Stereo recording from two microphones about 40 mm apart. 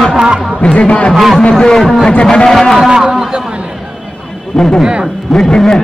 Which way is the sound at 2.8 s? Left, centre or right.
Centre.